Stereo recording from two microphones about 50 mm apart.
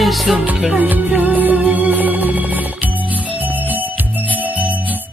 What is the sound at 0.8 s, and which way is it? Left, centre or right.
Music, right.